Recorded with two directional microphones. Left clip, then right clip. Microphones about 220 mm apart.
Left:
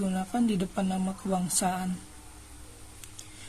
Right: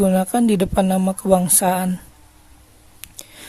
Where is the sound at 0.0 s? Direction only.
50° right (ahead or behind).